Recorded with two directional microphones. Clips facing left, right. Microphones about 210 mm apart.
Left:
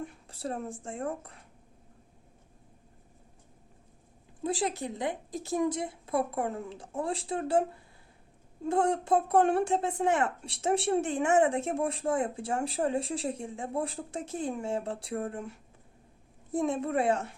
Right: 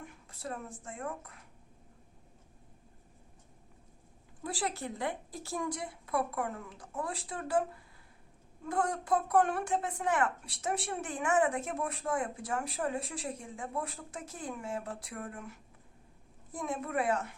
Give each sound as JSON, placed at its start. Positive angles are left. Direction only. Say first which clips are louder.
{"t": 0.0, "sound": "speech", "louder": "left 7 dB", "side_deg": 30}
{"t": 4.4, "sound": "speech", "louder": "left 5 dB", "side_deg": 20}